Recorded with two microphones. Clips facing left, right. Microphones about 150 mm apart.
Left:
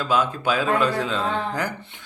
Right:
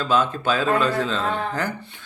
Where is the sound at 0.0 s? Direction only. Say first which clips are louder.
Right 1 dB; 10° left (ahead or behind).